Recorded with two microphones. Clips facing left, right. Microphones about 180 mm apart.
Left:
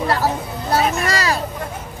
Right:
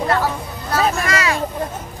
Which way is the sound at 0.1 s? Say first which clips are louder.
Even; 35° left (ahead or behind).